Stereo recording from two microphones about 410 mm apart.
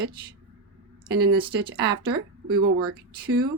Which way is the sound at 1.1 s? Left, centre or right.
Right.